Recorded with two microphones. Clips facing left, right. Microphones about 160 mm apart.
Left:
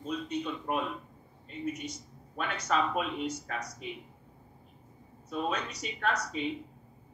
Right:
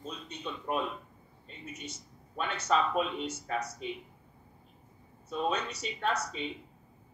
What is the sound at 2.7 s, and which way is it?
Speech, 25° right (ahead or behind).